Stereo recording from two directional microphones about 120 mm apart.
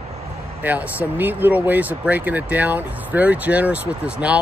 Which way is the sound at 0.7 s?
15° right (ahead or behind).